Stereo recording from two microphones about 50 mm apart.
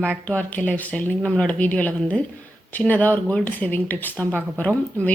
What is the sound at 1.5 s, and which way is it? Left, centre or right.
A woman's voice, left.